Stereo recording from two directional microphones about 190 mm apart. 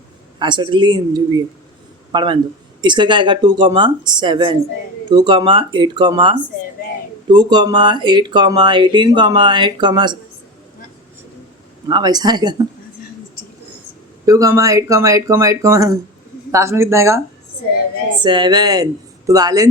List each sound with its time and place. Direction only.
0.3 s speech: 25° right (ahead or behind)
11.9 s speech: 20° right (ahead or behind)
14.3 s speech: 15° right (ahead or behind)